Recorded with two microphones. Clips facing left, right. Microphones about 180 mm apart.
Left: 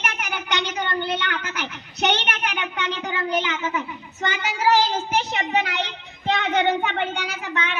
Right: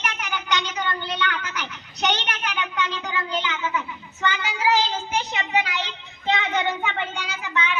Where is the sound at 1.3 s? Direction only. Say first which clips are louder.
Left 2 dB; 55° left (ahead or behind).